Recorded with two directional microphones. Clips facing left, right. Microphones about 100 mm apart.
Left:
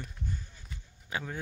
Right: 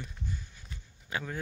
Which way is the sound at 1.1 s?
20° left (ahead or behind).